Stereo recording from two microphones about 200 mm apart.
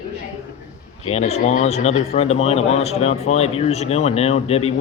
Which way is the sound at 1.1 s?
35° left (ahead or behind).